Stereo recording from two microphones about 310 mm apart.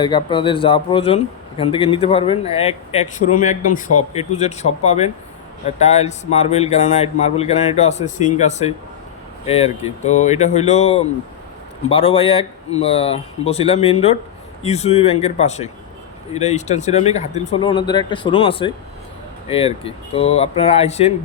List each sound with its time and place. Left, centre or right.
0.0 s a man's voice: centre